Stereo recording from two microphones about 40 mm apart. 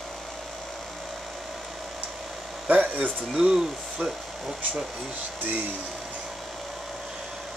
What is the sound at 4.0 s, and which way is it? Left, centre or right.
Speech, right.